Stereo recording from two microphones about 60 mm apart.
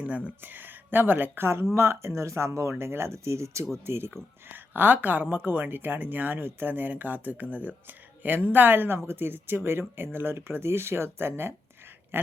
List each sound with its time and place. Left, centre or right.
0.4 s speech: right
1.7 s speech: right